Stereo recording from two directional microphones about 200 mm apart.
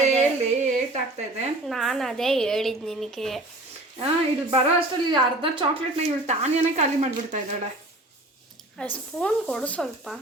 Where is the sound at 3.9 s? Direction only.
30° right (ahead or behind).